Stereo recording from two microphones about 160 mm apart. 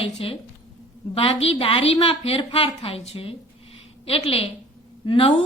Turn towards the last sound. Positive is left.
turn(degrees=35)  # may be behind; listen again after turning